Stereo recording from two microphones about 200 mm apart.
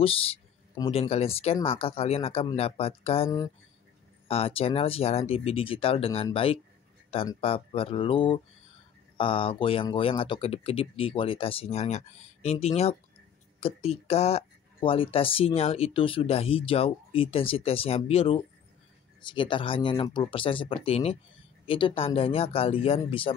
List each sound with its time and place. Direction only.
0.0 s speech: 30° left (ahead or behind)
3.3 s speech: 15° left (ahead or behind)
4.3 s speech: 30° left (ahead or behind)